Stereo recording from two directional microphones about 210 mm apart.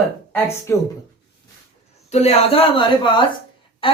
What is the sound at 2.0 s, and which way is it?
A woman's voice, 30° left (ahead or behind).